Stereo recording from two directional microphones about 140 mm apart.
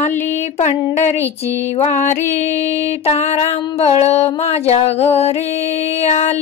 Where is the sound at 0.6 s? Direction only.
55° left (ahead or behind).